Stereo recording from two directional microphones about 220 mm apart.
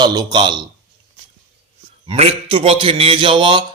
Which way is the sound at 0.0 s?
20° right (ahead or behind).